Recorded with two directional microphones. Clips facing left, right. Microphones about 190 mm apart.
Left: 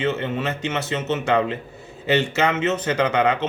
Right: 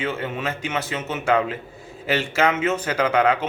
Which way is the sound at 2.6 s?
10° right (ahead or behind).